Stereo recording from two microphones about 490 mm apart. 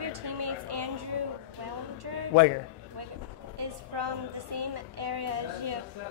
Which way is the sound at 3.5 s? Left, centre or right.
Right.